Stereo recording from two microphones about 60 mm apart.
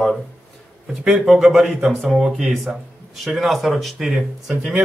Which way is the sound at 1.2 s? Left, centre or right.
Centre.